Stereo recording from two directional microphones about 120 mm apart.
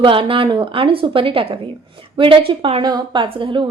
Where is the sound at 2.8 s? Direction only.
35° right (ahead or behind).